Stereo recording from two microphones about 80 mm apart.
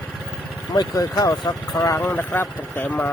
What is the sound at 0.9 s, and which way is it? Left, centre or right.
Speech, left.